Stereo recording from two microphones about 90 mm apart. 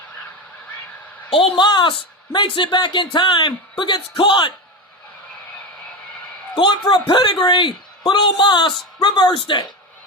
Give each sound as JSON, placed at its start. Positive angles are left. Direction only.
{"t": 1.3, "sound": "speech", "side_deg": 85}
{"t": 6.6, "sound": "speech", "side_deg": 60}